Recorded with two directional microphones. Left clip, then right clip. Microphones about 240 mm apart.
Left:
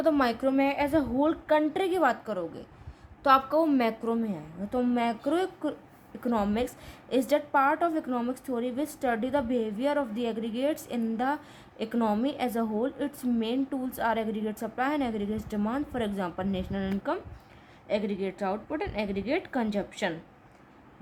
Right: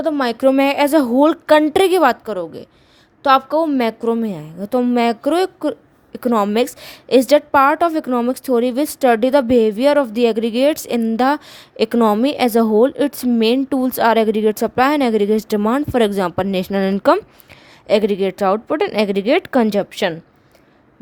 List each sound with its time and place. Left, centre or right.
0.0 s a woman's voice: right